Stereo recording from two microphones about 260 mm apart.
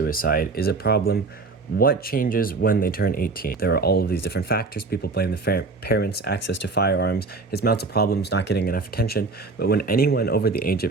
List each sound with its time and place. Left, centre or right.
0.0 s speech: left